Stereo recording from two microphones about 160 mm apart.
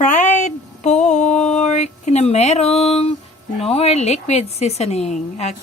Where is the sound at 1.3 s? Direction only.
5° left (ahead or behind).